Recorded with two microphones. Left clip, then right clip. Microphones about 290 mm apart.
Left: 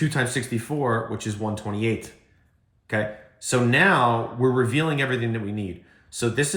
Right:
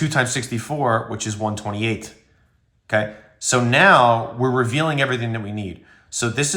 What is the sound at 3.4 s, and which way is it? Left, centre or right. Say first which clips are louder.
Speech: right 5 dB; centre.